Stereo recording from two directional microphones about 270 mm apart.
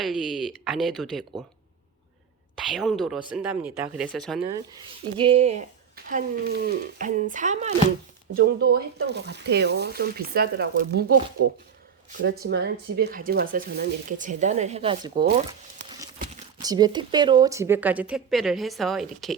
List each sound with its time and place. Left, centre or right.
0.0 s speech: centre
2.6 s speech: centre
5.2 s speech: right
15.4 s crumpling: right
16.2 s speech: centre